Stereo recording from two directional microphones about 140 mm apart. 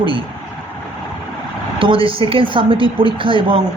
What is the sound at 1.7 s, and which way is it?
A man's voice, 40° right (ahead or behind).